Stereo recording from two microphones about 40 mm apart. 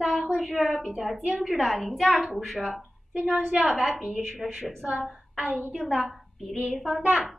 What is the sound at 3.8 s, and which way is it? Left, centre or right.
Speech, centre.